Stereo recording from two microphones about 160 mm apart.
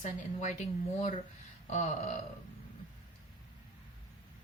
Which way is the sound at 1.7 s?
45° left (ahead or behind).